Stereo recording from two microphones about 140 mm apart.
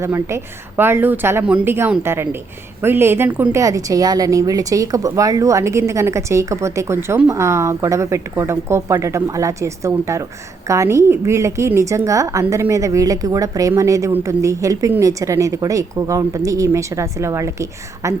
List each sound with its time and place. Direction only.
0.0 s a woman's voice: 20° right (ahead or behind)
3.6 s a woman's voice: 25° right (ahead or behind)